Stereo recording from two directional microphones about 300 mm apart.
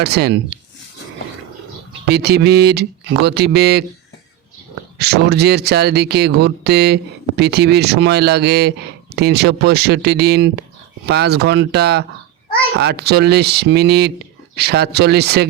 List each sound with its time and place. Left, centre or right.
0.0 s speech: right
2.0 s speech: right
4.9 s speech: right